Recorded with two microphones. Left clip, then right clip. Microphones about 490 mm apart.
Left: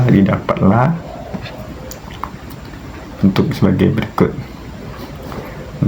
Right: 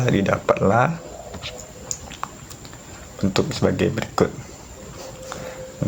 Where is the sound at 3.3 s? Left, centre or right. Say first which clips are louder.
Left 2 dB; right.